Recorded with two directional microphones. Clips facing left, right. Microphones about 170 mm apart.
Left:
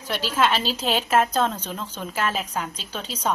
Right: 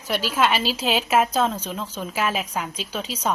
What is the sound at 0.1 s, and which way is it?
A woman's voice, 10° right (ahead or behind).